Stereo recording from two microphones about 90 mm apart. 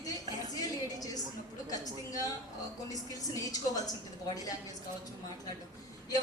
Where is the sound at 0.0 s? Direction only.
45° left (ahead or behind).